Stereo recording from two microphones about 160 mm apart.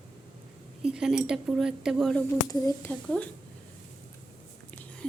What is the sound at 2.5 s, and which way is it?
Speech, 20° left (ahead or behind).